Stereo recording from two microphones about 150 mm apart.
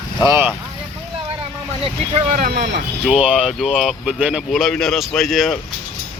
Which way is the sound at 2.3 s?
80° right.